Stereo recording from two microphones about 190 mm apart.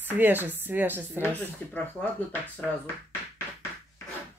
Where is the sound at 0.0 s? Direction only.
10° right (ahead or behind).